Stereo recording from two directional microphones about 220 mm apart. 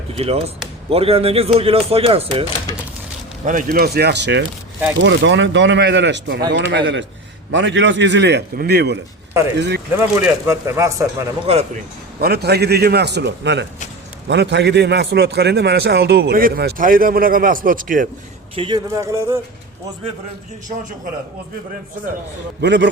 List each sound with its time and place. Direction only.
0.1 s speech: 25° right (ahead or behind)
3.4 s a man's voice: 40° right (ahead or behind)
10.0 s speech: 10° right (ahead or behind)
11.5 s speech: 25° right (ahead or behind)
12.2 s a man's voice: 45° right (ahead or behind)
18.5 s speech: 20° right (ahead or behind)
22.6 s a man's voice: 50° right (ahead or behind)